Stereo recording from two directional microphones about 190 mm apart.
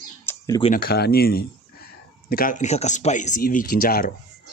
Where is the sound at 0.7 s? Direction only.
55° left (ahead or behind).